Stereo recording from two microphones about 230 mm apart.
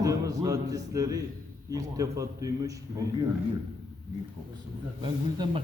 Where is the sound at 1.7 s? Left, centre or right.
Centre.